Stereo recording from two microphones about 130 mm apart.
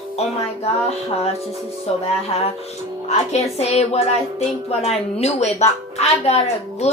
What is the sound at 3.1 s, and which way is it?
Speech, 55° left (ahead or behind).